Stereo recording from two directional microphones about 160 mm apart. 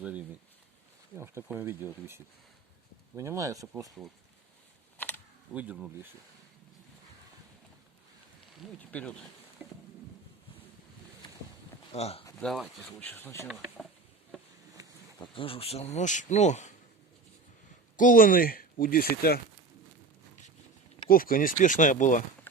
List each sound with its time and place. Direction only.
0.0 s speech: 5° right (ahead or behind)
3.2 s speech: 20° right (ahead or behind)
4.9 s typing: 10° left (ahead or behind)
5.5 s speech: 10° right (ahead or behind)
8.9 s speech: 10° left (ahead or behind)
9.6 s boat: 10° right (ahead or behind)
11.9 s speech: 40° left (ahead or behind)
12.4 s speech: centre (ahead or behind)
13.5 s speech: 5° right (ahead or behind)
15.2 s speech: 35° left (ahead or behind)
17.9 s speech: 55° left (ahead or behind); by 19.4 s 70° left (ahead or behind)
21.1 s speech: 65° left (ahead or behind)